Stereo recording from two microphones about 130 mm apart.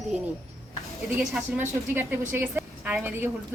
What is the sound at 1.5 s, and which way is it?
A woman's voice, 15° right (ahead or behind).